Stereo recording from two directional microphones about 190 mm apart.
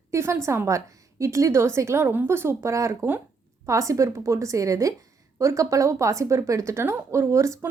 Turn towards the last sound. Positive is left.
turn(degrees=-15)  # may be behind; listen again after turning